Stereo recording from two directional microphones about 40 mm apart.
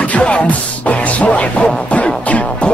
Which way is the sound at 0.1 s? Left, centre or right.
Left.